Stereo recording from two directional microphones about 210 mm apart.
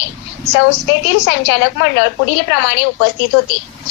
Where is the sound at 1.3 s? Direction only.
60° left (ahead or behind).